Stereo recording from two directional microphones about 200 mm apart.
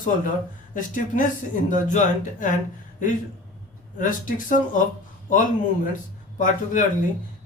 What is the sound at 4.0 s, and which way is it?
A man's voice, 40° left (ahead or behind).